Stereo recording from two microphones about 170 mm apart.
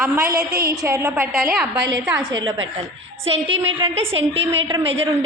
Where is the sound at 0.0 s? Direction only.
15° right (ahead or behind).